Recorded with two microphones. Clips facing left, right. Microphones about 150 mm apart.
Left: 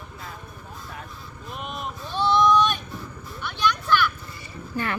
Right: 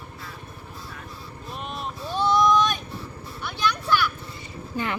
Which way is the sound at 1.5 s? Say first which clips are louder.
Even; centre (ahead or behind).